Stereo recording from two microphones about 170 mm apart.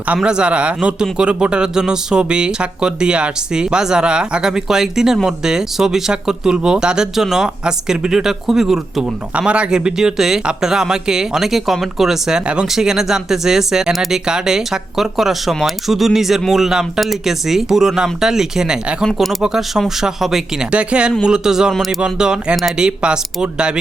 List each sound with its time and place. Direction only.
0.1 s a man's voice: 5° right (ahead or behind)